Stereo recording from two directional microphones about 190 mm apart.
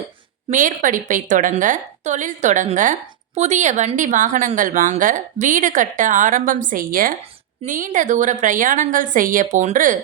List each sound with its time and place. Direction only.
0.5 s a woman's voice: 45° right (ahead or behind)